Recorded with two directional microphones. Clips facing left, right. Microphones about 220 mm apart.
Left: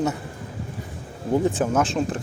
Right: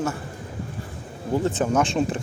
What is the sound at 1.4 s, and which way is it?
Speech, 10° left (ahead or behind).